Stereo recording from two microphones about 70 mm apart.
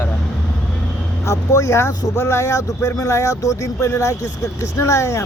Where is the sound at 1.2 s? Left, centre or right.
Left.